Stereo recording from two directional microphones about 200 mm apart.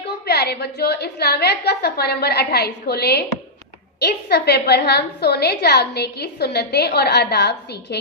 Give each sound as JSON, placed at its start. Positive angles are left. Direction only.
{"t": 0.3, "sound": "a woman's voice", "side_deg": 55}